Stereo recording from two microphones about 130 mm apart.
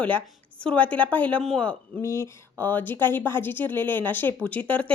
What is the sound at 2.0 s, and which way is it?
Speech, 20° left (ahead or behind).